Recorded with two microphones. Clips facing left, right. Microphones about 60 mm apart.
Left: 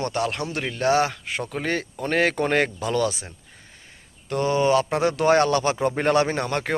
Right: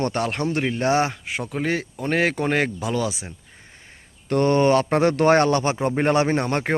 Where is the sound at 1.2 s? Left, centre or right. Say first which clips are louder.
Right 2 dB; centre.